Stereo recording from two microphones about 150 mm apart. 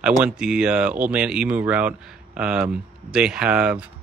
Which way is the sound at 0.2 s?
5° right (ahead or behind).